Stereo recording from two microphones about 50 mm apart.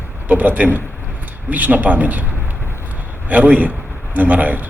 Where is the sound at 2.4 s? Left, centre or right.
Right.